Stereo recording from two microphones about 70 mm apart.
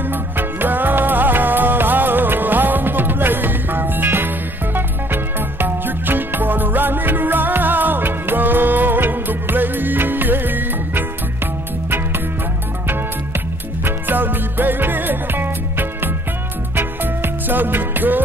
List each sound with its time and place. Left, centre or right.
0.1 s music: right
13.8 s music: right